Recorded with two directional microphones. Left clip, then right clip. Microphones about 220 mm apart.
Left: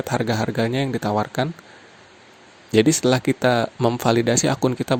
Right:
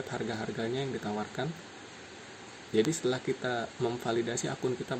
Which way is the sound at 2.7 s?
50° left (ahead or behind).